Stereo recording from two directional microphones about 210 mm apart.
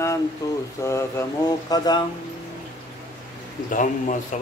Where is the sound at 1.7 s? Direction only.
20° left (ahead or behind).